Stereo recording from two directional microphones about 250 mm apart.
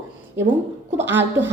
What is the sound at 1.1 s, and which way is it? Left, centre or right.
Speech, centre.